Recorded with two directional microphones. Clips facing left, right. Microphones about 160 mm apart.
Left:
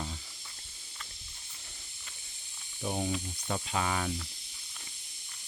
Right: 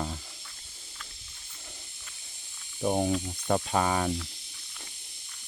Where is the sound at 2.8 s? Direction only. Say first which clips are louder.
Right 7 dB; 50° right (ahead or behind).